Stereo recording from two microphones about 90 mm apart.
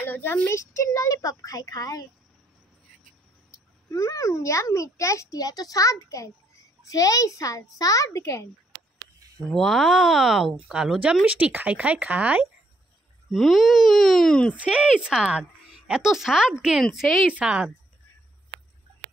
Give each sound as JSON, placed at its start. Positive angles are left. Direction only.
{"t": 0.0, "sound": "a child's voice", "side_deg": 20}
{"t": 3.5, "sound": "a child's voice", "side_deg": 40}
{"t": 9.5, "sound": "speech", "side_deg": 0}
{"t": 13.3, "sound": "speech", "side_deg": 0}
{"t": 14.5, "sound": "speech", "side_deg": -15}
{"t": 17.3, "sound": "speech", "side_deg": -15}